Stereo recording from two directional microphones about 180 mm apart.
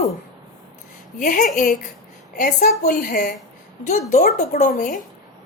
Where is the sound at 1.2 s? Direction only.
50° left (ahead or behind).